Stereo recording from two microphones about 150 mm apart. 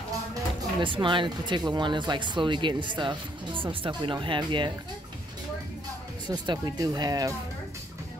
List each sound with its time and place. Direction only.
0.7 s speech: 30° right (ahead or behind)
6.2 s speech: 30° right (ahead or behind)